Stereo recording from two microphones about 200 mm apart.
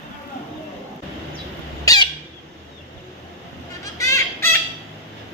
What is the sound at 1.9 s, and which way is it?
Squawk, 15° left (ahead or behind).